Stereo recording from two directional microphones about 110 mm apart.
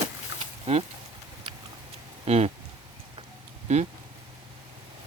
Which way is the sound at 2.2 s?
75° right (ahead or behind).